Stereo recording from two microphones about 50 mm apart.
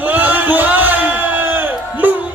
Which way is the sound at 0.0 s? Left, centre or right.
Right.